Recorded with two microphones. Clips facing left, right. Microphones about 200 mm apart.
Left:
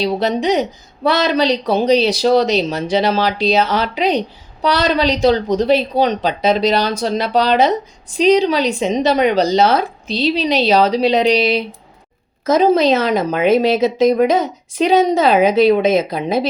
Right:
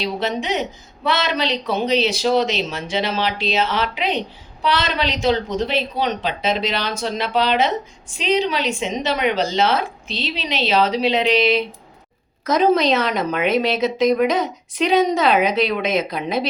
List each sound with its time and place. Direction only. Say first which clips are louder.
0.0 s a woman's voice: left 7 dB; 35° left (ahead or behind)
13.0 s a woman's voice: left 5 dB; 35° left (ahead or behind)